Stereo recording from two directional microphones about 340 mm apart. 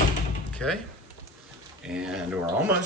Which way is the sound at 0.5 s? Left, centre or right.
Centre.